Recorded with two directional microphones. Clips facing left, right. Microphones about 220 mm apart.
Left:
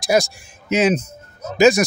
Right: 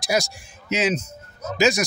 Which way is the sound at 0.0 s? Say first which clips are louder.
Left 6 dB; 55° left (ahead or behind).